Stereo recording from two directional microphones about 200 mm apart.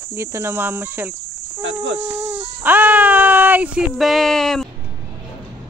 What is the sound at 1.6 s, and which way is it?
Speech, 70° right (ahead or behind).